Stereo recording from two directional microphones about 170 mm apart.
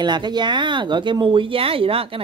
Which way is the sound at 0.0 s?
25° right (ahead or behind).